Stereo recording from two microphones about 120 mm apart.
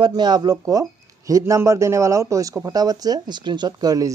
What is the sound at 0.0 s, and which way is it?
Speech, 35° right (ahead or behind).